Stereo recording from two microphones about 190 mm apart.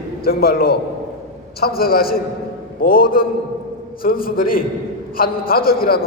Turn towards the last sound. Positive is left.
turn(degrees=50)  # may be behind; listen again after turning